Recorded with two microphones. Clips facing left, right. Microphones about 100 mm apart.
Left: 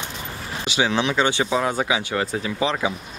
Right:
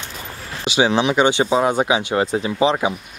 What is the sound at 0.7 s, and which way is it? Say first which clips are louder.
Speech: right 5 dB; 20° right (ahead or behind).